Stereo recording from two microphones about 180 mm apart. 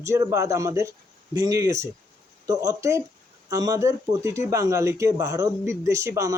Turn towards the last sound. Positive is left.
turn(degrees=-15)  # may be behind; listen again after turning